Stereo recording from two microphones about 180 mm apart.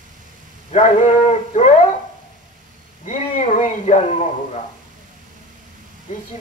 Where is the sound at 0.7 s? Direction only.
40° left (ahead or behind).